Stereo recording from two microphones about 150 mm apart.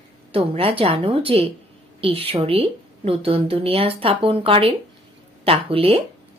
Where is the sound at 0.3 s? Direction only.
40° right (ahead or behind).